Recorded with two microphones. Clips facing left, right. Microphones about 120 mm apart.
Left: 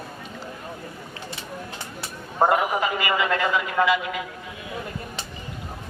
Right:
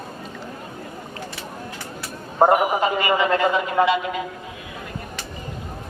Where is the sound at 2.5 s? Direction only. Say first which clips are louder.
Right 4 dB; 30° right (ahead or behind).